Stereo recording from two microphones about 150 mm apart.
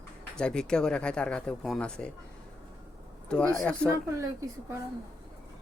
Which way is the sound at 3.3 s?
10° left (ahead or behind).